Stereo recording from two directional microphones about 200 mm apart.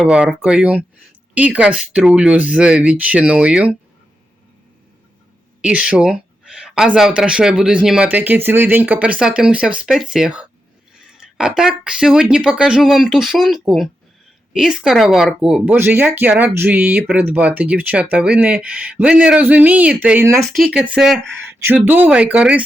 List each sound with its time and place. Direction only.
0.0 s speech: 5° right (ahead or behind)
5.6 s speech: 5° right (ahead or behind)
11.2 s a sound: 5° right (ahead or behind)
11.9 s speech: 5° right (ahead or behind)